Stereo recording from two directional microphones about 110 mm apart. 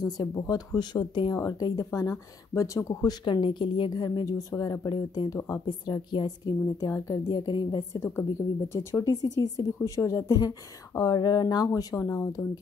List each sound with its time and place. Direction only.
0.0 s a woman's voice: 35° left (ahead or behind)
0.7 s a woman's voice: 40° left (ahead or behind)
1.3 s a woman's voice: 30° left (ahead or behind)
3.3 s a woman's voice: 45° left (ahead or behind); by 12.4 s 30° left (ahead or behind)